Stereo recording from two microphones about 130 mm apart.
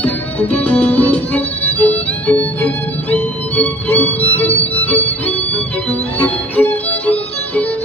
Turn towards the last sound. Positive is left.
turn(degrees=10)  # may be behind; listen again after turning